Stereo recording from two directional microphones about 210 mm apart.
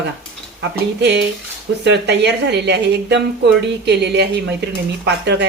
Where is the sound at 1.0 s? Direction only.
55° right (ahead or behind).